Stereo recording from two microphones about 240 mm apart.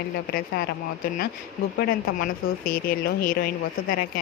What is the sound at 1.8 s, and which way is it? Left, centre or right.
A woman's voice, left.